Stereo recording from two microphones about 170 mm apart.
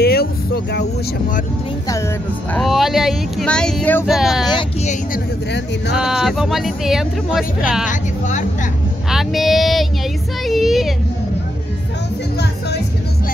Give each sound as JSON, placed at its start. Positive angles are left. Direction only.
{"t": 0.0, "sound": "vehicle", "side_deg": 65}
{"t": 2.5, "sound": "speech", "side_deg": 0}
{"t": 5.9, "sound": "speech", "side_deg": 0}
{"t": 7.9, "sound": "speech", "side_deg": 45}
{"t": 9.1, "sound": "speech", "side_deg": 0}
{"t": 12.4, "sound": "music", "side_deg": 75}